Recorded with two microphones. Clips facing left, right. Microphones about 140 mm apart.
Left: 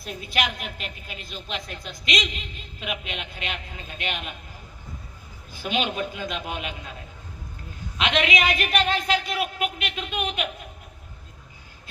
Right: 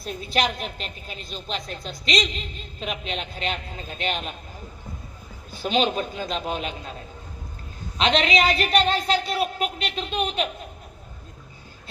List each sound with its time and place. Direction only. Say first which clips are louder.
0.0 s a woman's voice: right 3 dB; 30° right (ahead or behind)
5.6 s a woman's voice: right 4 dB; 30° right (ahead or behind)
7.9 s a woman's voice: right 3 dB; 30° right (ahead or behind)